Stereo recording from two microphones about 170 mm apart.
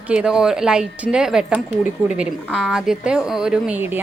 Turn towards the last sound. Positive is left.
turn(degrees=-10)  # may be behind; listen again after turning